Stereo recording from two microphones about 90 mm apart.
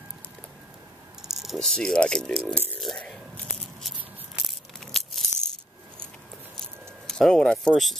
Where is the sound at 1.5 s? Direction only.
10° left (ahead or behind).